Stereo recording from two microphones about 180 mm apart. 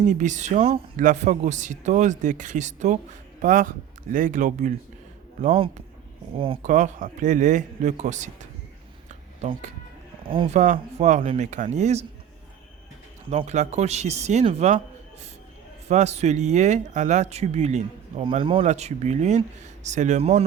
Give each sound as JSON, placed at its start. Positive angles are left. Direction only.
{"t": 0.0, "sound": "speech", "side_deg": -45}
{"t": 5.4, "sound": "speech", "side_deg": -30}
{"t": 6.7, "sound": "speech", "side_deg": -45}
{"t": 9.0, "sound": "a sound", "side_deg": -40}
{"t": 10.2, "sound": "speech", "side_deg": -30}
{"t": 13.3, "sound": "speech", "side_deg": -40}
{"t": 15.9, "sound": "speech", "side_deg": -40}